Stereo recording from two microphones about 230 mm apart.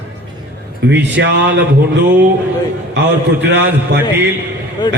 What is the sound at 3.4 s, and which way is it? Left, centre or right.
Speech, right.